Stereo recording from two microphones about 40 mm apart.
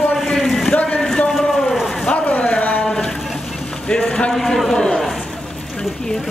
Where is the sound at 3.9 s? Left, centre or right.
Left.